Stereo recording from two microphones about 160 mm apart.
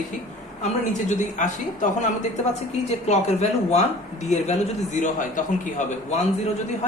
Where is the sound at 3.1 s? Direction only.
45° left (ahead or behind).